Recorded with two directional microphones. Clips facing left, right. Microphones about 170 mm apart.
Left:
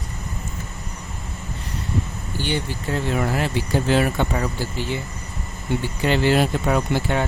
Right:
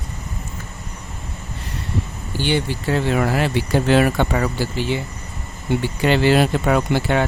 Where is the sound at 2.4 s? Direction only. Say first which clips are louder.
Right 5 dB; 85° right.